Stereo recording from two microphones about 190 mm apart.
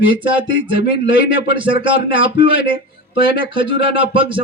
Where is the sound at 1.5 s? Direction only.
25° right (ahead or behind).